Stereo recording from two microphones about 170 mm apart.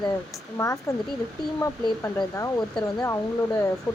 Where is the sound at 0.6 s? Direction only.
15° left (ahead or behind).